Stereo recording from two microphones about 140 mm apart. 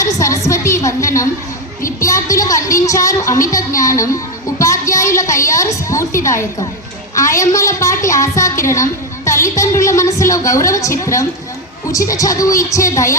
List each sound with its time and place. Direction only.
0.0 s a woman's voice: 20° left (ahead or behind)